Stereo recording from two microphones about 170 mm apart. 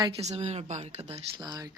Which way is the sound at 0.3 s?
40° right (ahead or behind).